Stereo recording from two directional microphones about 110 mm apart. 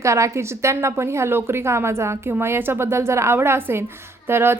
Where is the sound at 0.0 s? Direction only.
25° right (ahead or behind).